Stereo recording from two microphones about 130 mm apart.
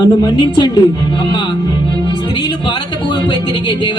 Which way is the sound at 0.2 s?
35° left (ahead or behind).